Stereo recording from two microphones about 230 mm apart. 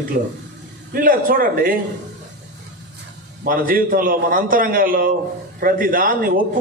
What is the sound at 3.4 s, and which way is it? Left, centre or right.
A man's voice, right.